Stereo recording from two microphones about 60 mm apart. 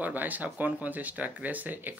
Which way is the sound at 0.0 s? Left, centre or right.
Right.